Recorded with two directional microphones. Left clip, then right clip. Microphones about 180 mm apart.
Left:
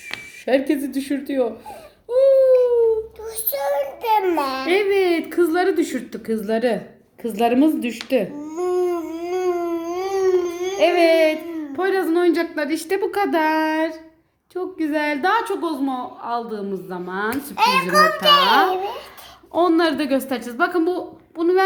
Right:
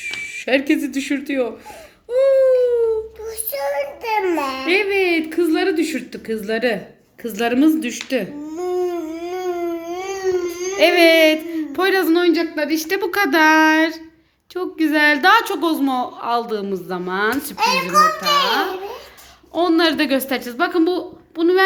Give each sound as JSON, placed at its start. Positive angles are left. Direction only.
{"t": 0.0, "sound": "speech", "side_deg": 5}
{"t": 2.0, "sound": "baby cry", "side_deg": 0}
{"t": 3.2, "sound": "child singing", "side_deg": -25}
{"t": 4.1, "sound": "a sound", "side_deg": -15}
{"t": 4.6, "sound": "speech", "side_deg": 10}
{"t": 8.4, "sound": "a sound", "side_deg": -15}
{"t": 10.3, "sound": "a sound", "side_deg": 0}
{"t": 12.2, "sound": "speech", "side_deg": 15}
{"t": 13.0, "sound": "a woman's voice", "side_deg": 5}
{"t": 15.8, "sound": "a woman's voice", "side_deg": -25}
{"t": 17.9, "sound": "a child's voice", "side_deg": 20}